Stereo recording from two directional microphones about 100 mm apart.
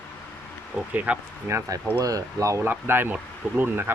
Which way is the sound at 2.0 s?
35° right (ahead or behind).